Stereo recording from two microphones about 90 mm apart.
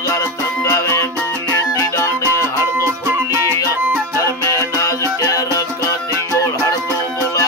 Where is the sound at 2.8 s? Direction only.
30° right (ahead or behind).